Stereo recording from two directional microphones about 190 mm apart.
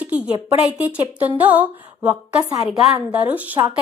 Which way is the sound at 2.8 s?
5° right (ahead or behind).